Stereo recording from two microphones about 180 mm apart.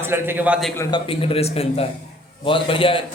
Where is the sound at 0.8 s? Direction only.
25° left (ahead or behind).